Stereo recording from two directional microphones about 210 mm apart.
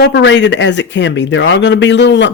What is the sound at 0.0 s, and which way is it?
Speech, 60° left (ahead or behind).